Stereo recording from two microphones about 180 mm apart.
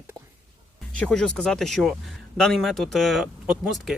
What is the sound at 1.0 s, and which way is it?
Speech, 5° left (ahead or behind).